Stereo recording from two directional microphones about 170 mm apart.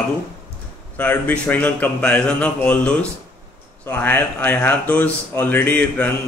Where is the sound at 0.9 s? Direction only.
10° left (ahead or behind).